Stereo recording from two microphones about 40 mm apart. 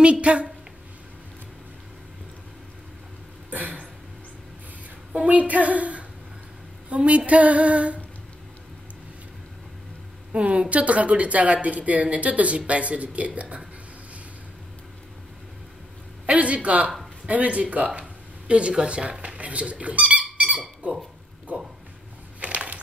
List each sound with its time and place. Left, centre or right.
0.0 s a woman's voice: right
3.4 s a sound: right
5.1 s a woman's voice: right
10.3 s speech: right
16.3 s speech: right
21.5 s a sound: right